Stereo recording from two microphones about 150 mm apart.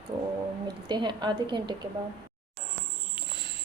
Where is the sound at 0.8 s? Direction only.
30° right (ahead or behind).